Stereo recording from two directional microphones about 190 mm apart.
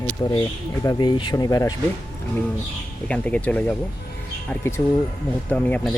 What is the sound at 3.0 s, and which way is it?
Speech, 5° left (ahead or behind).